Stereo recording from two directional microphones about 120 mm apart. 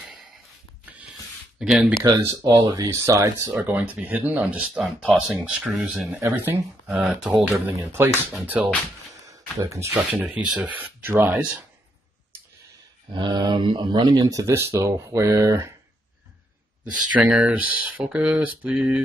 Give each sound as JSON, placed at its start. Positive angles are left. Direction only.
{"t": 1.6, "sound": "speech", "side_deg": -5}
{"t": 2.0, "sound": "speech", "side_deg": -35}
{"t": 3.6, "sound": "speech", "side_deg": -15}
{"t": 6.2, "sound": "speech", "side_deg": -20}
{"t": 6.9, "sound": "speech", "side_deg": -5}
{"t": 7.6, "sound": "speech", "side_deg": -20}
{"t": 10.2, "sound": "speech", "side_deg": -10}
{"t": 13.1, "sound": "speech", "side_deg": -40}
{"t": 17.2, "sound": "speech", "side_deg": -10}